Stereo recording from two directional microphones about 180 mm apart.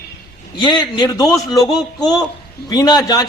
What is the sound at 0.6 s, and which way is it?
A man's voice, 25° left (ahead or behind).